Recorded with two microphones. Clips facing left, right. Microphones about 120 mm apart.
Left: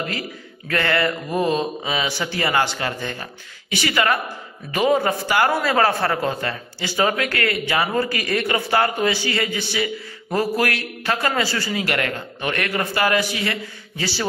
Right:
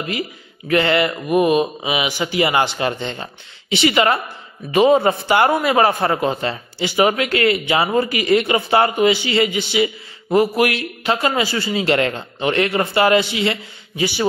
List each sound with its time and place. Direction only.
0.7 s a man's voice: 20° right (ahead or behind)